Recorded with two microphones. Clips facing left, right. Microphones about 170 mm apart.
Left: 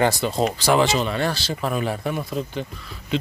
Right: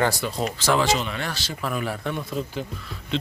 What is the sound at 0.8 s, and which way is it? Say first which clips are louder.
Speech: left 3 dB; 35° left (ahead or behind).